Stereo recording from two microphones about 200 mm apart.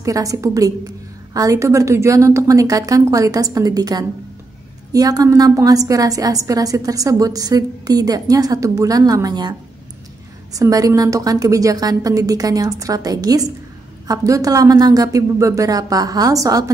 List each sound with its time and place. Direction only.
0.0 s a woman's voice: 15° right (ahead or behind)